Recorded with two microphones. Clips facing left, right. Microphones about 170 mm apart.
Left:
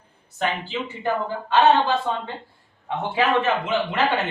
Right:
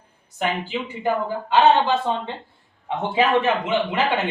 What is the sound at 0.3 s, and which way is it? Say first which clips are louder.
Speech: right 1 dB; 15° right (ahead or behind).